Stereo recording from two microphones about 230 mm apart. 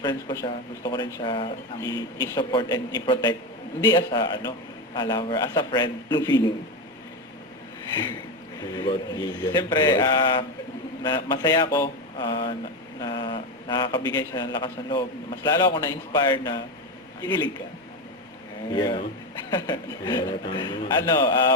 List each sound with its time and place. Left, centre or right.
0.0 s speech: centre
8.7 s a man's voice: centre
18.7 s speech: centre